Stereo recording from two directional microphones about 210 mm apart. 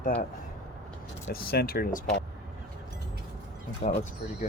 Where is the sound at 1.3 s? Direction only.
50° left (ahead or behind).